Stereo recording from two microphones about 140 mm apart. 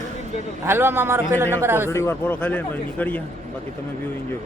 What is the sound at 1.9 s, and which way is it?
Speech, 20° left (ahead or behind).